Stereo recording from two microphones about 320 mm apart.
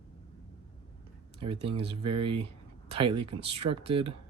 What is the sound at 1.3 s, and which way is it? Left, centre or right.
Speech, centre.